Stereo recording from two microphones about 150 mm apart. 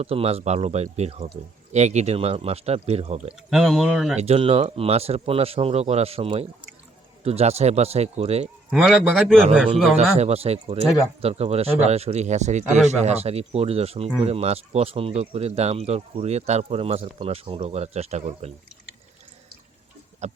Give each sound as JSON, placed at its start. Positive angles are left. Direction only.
{"t": 0.0, "sound": "speech", "side_deg": -40}
{"t": 3.5, "sound": "a man's voice", "side_deg": -5}
{"t": 4.2, "sound": "speech", "side_deg": -40}
{"t": 8.7, "sound": "a man's voice", "side_deg": -5}
{"t": 10.2, "sound": "speech", "side_deg": -45}
{"t": 20.2, "sound": "speech", "side_deg": -50}